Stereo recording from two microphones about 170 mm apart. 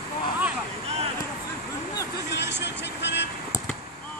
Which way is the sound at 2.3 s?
90° left.